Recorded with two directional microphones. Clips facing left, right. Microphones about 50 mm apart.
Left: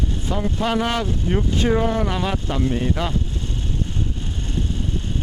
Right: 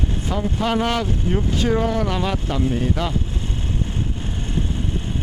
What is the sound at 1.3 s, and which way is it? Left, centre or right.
Speech, left.